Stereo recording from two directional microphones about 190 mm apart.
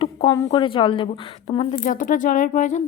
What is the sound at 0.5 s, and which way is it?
Speech, 25° left (ahead or behind).